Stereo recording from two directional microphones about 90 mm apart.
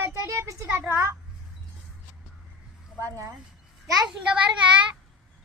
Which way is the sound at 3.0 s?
35° right (ahead or behind).